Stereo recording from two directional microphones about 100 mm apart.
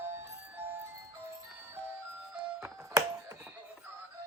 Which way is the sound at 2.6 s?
30° right (ahead or behind).